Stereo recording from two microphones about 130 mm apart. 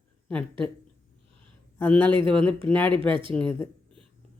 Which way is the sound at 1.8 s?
15° left (ahead or behind).